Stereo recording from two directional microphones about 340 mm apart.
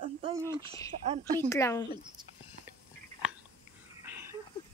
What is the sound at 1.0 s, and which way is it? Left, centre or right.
Speech, centre.